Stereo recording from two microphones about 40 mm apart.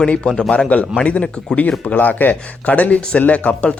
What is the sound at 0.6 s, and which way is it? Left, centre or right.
A man's voice, left.